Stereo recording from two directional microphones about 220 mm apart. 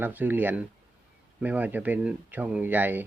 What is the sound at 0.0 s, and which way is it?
Speech, 10° right (ahead or behind).